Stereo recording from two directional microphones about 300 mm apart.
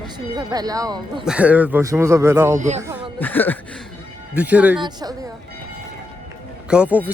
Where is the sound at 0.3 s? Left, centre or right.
Centre.